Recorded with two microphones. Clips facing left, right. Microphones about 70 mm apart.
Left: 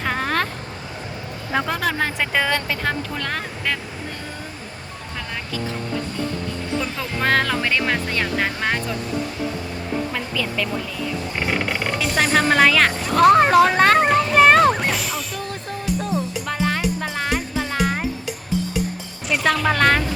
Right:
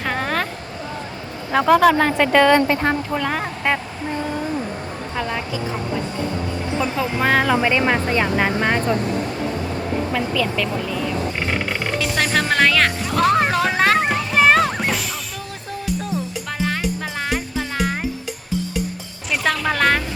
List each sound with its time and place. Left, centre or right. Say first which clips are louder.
0.0 s vehicle: even; centre
1.5 s a woman's voice: right 9 dB; centre
2.5 s speech: right 7 dB; right
3.2 s speech: right 4 dB; centre
6.9 s speech: right 2 dB; centre
10.1 s a woman's voice: right 5 dB; centre
11.3 s a sound: even; centre
16.0 s music: left 2 dB; centre
19.3 s a woman's voice: left 1 dB; centre